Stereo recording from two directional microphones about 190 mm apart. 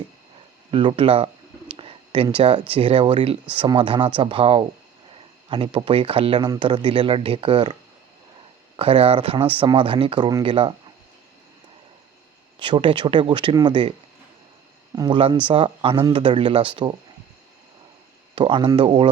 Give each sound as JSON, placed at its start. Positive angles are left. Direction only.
{"t": 0.7, "sound": "speech", "side_deg": -25}
{"t": 12.5, "sound": "speech", "side_deg": -25}
{"t": 14.9, "sound": "speech", "side_deg": -25}
{"t": 18.3, "sound": "speech", "side_deg": -25}